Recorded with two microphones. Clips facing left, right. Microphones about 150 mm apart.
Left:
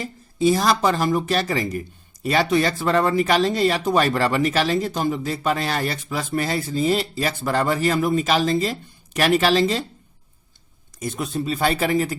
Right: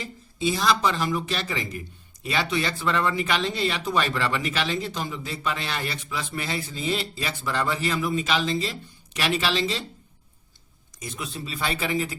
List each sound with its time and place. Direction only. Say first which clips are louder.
0.0 s speech: left 7 dB; 45° left (ahead or behind)
11.0 s speech: left 9 dB; 50° left (ahead or behind)